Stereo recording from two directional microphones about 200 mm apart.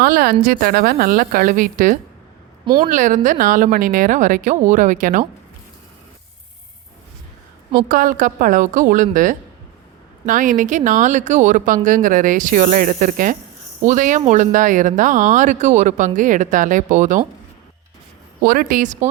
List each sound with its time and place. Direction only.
0.0 s a woman's voice: 45° right (ahead or behind)
2.6 s a woman's voice: 20° right (ahead or behind)
2.9 s speech: 40° right (ahead or behind)
7.7 s a woman's voice: 45° right (ahead or behind)
18.4 s speech: 45° right (ahead or behind)